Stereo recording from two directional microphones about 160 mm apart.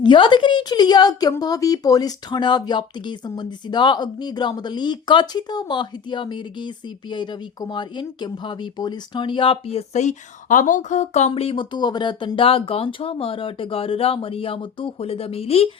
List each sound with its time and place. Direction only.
0.0 s a woman's voice: 30° left (ahead or behind)